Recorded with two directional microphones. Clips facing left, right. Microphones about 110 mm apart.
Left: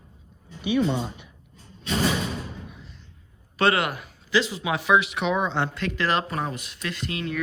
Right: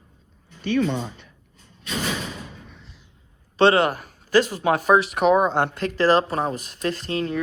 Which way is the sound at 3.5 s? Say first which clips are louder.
Right 5 dB; 30° right (ahead or behind).